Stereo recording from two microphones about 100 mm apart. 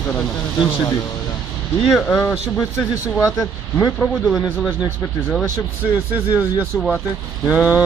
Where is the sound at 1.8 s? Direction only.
5° left (ahead or behind).